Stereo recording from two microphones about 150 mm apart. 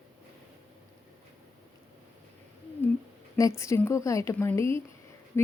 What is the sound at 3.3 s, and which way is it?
A woman's voice, 20° left (ahead or behind).